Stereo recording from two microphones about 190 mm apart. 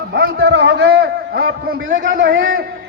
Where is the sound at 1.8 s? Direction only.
75° right (ahead or behind).